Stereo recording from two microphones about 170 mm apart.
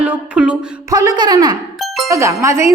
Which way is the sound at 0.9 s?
20° right (ahead or behind).